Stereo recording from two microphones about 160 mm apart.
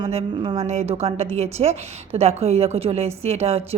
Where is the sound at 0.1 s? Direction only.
40° right (ahead or behind).